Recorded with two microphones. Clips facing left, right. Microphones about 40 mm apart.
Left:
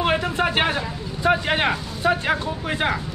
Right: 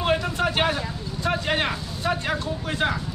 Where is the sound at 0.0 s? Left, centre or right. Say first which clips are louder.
Left 2 dB; left.